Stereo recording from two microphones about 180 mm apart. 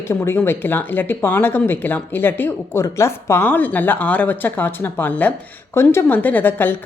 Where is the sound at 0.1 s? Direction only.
15° left (ahead or behind).